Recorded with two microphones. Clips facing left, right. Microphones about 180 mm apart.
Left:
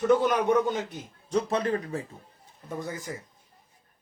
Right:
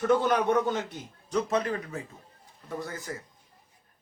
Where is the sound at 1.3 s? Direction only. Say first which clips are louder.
Left 1 dB; 30° left (ahead or behind).